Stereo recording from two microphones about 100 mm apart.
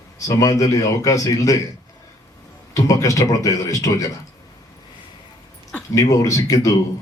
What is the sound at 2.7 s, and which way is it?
A man's voice, 35° left (ahead or behind).